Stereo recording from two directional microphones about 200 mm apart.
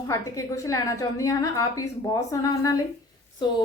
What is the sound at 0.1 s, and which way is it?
A woman's voice, 15° left (ahead or behind).